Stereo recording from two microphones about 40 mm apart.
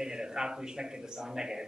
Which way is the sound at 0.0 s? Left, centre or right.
Centre.